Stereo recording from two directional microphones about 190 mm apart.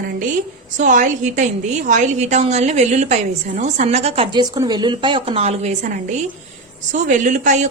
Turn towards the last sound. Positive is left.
turn(degrees=-40)  # may be behind; listen again after turning